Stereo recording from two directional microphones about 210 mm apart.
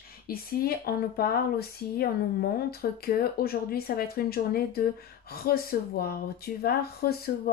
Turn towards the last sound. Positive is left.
turn(degrees=50)  # may be behind; listen again after turning